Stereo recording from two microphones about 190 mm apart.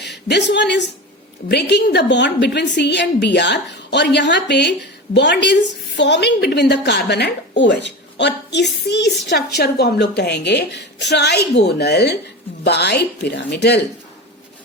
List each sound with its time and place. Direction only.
0.3 s a woman's voice: 65° left (ahead or behind)